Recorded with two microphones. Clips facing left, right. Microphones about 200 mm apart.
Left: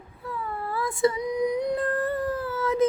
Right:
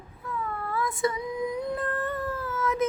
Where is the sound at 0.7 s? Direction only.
30° left (ahead or behind).